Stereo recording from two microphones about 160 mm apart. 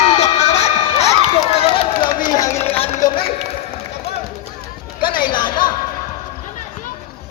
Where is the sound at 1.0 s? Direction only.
40° left (ahead or behind).